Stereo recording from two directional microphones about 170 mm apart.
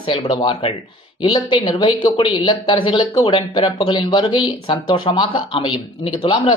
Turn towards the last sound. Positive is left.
turn(degrees=30)  # may be behind; listen again after turning